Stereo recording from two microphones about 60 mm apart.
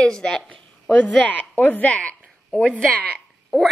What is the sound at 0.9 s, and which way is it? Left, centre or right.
A woman's voice, left.